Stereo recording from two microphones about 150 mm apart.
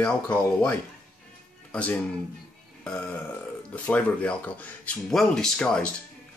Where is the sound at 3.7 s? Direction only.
10° left (ahead or behind).